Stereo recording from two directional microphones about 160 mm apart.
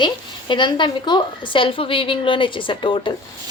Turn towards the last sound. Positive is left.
turn(degrees=30)  # may be behind; listen again after turning